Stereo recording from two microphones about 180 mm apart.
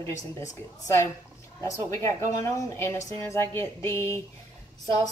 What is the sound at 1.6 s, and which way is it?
Speech, 15° left (ahead or behind).